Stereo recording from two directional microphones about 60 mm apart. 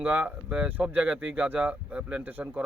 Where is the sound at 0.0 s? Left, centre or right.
Right.